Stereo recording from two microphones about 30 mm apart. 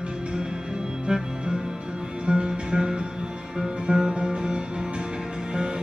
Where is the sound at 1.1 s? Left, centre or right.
Right.